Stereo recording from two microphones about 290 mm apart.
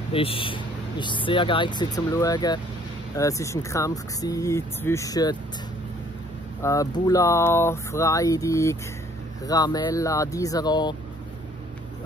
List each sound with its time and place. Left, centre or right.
0.1 s speech: centre
6.6 s speech: centre